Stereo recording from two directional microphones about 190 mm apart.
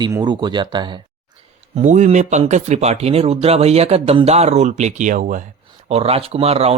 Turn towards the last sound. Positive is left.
turn(degrees=-30)  # may be behind; listen again after turning